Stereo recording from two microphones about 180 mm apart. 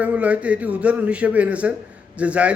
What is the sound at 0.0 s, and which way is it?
Speech, 5° right (ahead or behind).